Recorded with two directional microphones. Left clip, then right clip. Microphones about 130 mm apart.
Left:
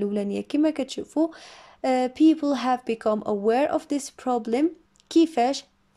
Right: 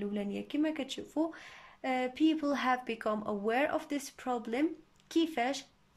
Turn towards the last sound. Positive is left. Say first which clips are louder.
# left 11 dB
turn(degrees=40)  # may be behind; listen again after turning